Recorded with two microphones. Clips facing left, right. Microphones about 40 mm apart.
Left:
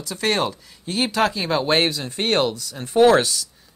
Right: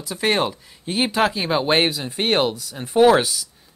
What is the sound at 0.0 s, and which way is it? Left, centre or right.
Speech, centre.